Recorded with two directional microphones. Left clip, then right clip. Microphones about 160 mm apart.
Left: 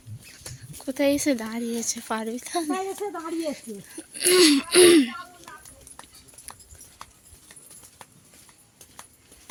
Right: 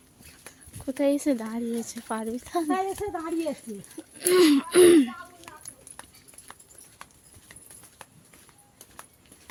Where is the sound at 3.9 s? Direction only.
Centre (ahead or behind).